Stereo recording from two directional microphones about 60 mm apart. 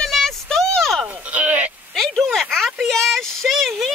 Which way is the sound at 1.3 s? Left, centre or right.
Right.